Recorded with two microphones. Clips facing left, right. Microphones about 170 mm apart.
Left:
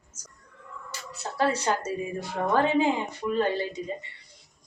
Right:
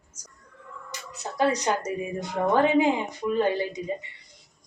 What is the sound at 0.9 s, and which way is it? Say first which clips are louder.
A woman's voice: even; 15° right (ahead or behind).